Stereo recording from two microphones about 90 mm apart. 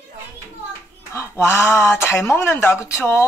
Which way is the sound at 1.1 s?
30° left (ahead or behind).